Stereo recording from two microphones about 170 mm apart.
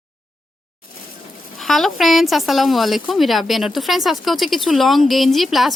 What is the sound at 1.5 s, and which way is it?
Speech, centre (ahead or behind).